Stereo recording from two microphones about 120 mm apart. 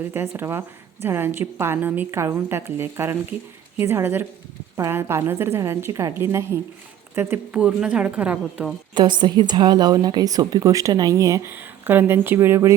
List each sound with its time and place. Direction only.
0.0 s a woman's voice: 20° right (ahead or behind)
9.0 s a woman's voice: 40° right (ahead or behind); by 12.7 s 20° right (ahead or behind)